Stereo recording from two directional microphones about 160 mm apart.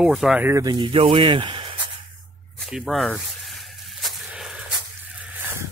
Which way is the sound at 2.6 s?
Centre (ahead or behind).